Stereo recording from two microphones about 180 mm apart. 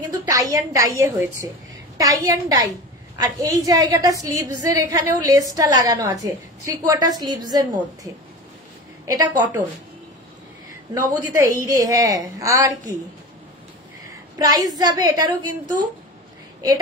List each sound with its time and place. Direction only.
0.3 s a woman's voice: 20° right (ahead or behind)
11.0 s a woman's voice: 20° right (ahead or behind)
14.4 s a woman's voice: 20° right (ahead or behind)